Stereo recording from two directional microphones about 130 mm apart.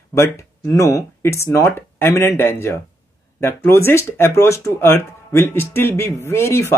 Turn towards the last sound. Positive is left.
turn(degrees=20)  # may be behind; listen again after turning